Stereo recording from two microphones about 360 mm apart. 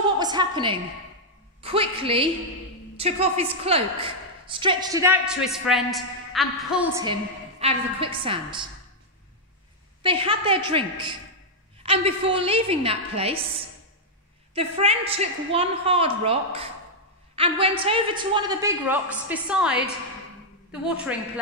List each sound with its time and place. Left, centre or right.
0.2 s a woman's voice: centre
10.0 s a woman's voice: centre
14.5 s a woman's voice: centre